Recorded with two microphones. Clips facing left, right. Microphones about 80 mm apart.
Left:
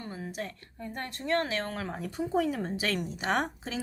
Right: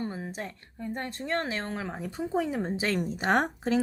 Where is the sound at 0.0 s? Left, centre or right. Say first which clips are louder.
Right 3 dB; right.